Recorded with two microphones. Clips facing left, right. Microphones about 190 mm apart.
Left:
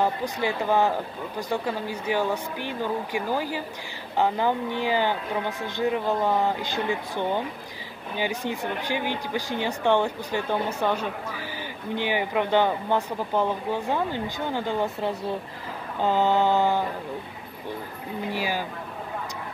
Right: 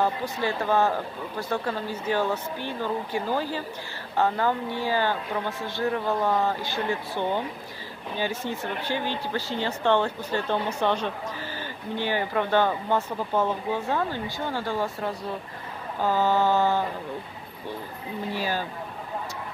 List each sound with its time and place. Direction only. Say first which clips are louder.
0.0 s speech: left 1 dB; 15° left (ahead or behind)
18.3 s speech: even; 10° left (ahead or behind)